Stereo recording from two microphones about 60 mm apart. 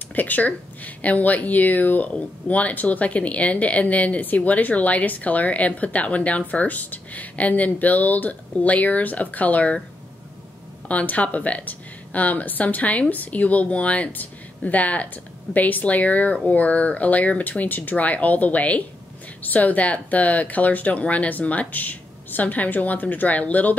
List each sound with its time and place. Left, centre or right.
0.1 s speech: left
10.9 s speech: left